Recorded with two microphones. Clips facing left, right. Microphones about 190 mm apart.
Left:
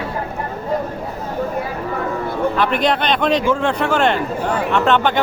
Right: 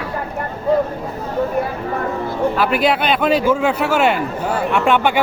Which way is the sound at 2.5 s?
5° right (ahead or behind).